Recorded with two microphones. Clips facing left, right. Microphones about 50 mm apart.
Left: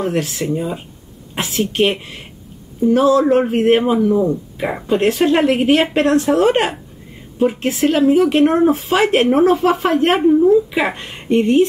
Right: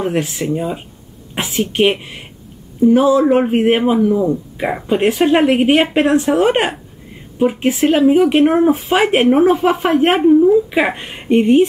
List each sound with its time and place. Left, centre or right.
0.0 s a woman's voice: centre